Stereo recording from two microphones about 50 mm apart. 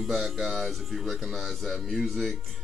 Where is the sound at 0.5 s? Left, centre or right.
Centre.